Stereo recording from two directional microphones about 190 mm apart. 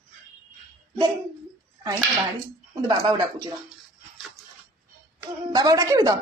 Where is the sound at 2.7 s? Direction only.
20° right (ahead or behind).